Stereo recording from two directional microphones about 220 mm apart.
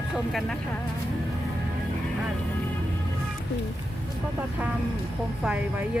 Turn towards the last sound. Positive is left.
turn(degrees=-5)  # may be behind; listen again after turning